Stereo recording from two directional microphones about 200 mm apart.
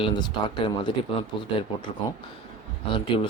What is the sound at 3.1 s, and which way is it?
Speech, 25° left (ahead or behind).